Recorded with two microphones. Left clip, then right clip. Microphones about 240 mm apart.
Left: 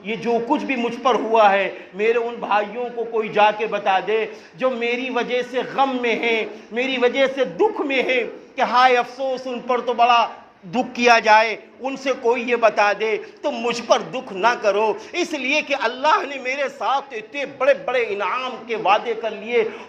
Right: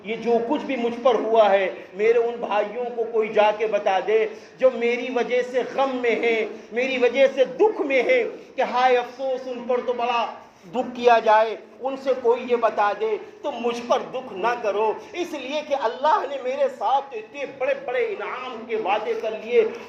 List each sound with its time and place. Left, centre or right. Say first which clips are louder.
0.1 s a man's voice: left 1 dB; left
15.9 s a woman's voice: left 1 dB; left
16.5 s a man's voice: even; left